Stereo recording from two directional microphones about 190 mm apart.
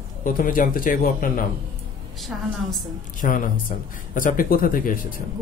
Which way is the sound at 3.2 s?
45° left (ahead or behind).